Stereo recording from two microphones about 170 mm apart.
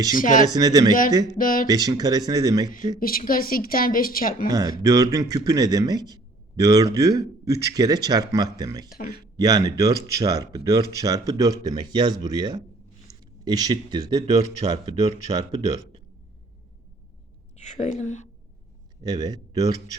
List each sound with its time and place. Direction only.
0.2 s a woman's voice: 50° left (ahead or behind)
0.4 s speech: 20° right (ahead or behind)
1.4 s a woman's voice: 55° left (ahead or behind)
1.6 s speech: 20° right (ahead or behind)
3.0 s a woman's voice: 55° left (ahead or behind)
4.8 s speech: 20° right (ahead or behind)
8.9 s a woman's voice: 65° left (ahead or behind)
9.4 s speech: 20° right (ahead or behind)
14.6 s speech: 40° right (ahead or behind)
15.3 s speech: 20° right (ahead or behind)
17.6 s a woman's voice: 40° left (ahead or behind)
19.0 s speech: 25° right (ahead or behind)